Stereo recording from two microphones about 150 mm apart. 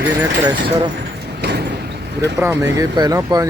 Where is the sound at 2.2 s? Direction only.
20° right (ahead or behind).